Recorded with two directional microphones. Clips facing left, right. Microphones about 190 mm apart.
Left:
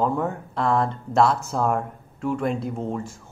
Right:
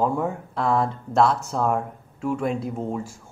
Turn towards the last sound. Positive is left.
turn(degrees=-5)  # may be behind; listen again after turning